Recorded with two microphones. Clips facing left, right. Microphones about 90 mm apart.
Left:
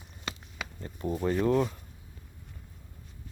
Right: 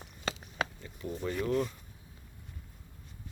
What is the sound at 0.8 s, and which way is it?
Speech, 40° left (ahead or behind).